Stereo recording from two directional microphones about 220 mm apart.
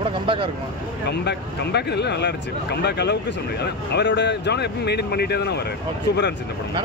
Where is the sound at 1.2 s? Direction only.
50° left (ahead or behind).